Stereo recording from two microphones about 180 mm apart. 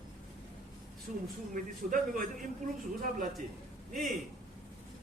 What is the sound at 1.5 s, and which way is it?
Speech, 50° right (ahead or behind).